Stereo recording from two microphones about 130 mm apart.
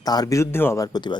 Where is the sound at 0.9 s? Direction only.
35° left (ahead or behind).